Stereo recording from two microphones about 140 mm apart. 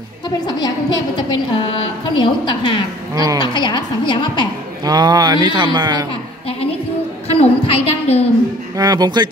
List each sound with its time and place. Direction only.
0.5 s a woman's voice: 30° left (ahead or behind)
4.8 s speech: 30° right (ahead or behind)
7.2 s a sound: 45° left (ahead or behind)
8.7 s speech: 30° right (ahead or behind)